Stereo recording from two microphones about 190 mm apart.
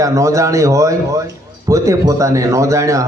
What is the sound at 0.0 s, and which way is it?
Speech, 15° right (ahead or behind).